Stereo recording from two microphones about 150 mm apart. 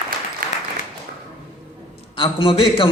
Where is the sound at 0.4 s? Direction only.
70° right (ahead or behind).